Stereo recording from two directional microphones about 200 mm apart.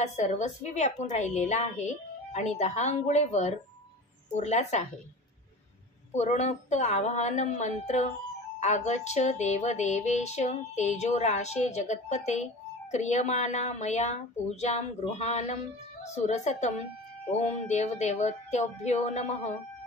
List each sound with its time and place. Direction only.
0.0 s music: 35° left (ahead or behind)
6.1 s music: 35° left (ahead or behind)